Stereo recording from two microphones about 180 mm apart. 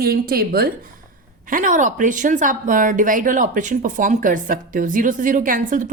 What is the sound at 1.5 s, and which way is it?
A woman's voice, 45° right (ahead or behind).